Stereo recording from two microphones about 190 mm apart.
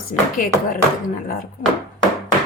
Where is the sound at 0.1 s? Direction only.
45° left (ahead or behind).